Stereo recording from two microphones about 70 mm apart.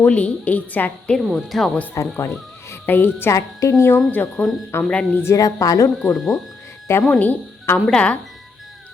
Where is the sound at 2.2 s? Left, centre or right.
Left.